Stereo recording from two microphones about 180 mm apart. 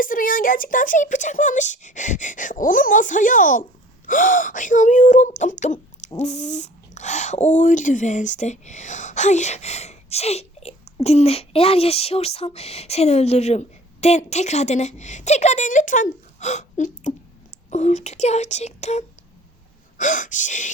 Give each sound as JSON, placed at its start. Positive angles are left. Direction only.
{"t": 0.0, "sound": "speech", "side_deg": 50}